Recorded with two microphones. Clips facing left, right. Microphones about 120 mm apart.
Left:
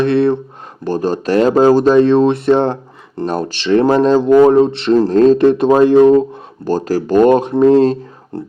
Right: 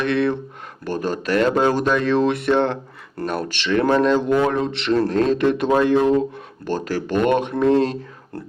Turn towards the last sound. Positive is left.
turn(degrees=35)  # may be behind; listen again after turning